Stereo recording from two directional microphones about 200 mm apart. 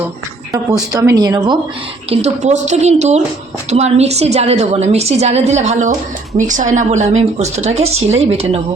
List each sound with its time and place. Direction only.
0.5 s a woman's voice: 15° right (ahead or behind)
2.0 s a woman's voice: 35° right (ahead or behind)